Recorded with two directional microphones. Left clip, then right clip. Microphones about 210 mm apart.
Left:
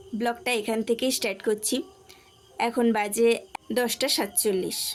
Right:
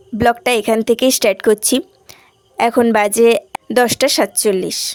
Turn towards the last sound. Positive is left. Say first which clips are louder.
# right 11 dB
turn(degrees=-50)  # may be behind; listen again after turning